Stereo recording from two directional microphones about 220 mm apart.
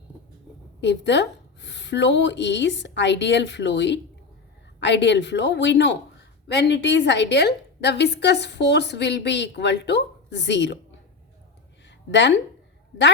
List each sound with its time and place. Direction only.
0.8 s a woman's voice: 50° left (ahead or behind)
12.1 s speech: 55° left (ahead or behind)